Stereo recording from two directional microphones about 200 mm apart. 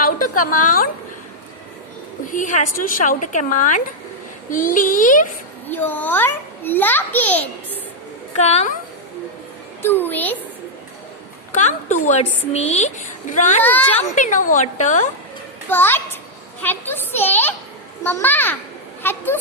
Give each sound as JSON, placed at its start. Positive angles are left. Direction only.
{"t": 0.6, "sound": "a woman's voice", "side_deg": 40}
{"t": 2.2, "sound": "a woman's voice", "side_deg": 40}
{"t": 5.6, "sound": "a child's voice", "side_deg": 10}
{"t": 8.4, "sound": "a woman's voice", "side_deg": 35}
{"t": 9.8, "sound": "a child's voice", "side_deg": 10}
{"t": 11.5, "sound": "a woman's voice", "side_deg": 35}
{"t": 13.6, "sound": "a child's voice", "side_deg": 10}
{"t": 14.2, "sound": "a woman's voice", "side_deg": 40}
{"t": 15.7, "sound": "a child's voice", "side_deg": 10}